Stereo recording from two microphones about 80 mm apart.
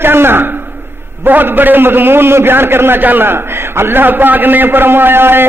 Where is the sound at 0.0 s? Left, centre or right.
Right.